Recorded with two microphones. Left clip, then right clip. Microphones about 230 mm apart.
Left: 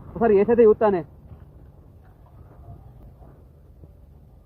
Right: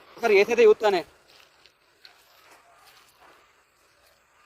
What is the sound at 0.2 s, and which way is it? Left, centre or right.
Speech, right.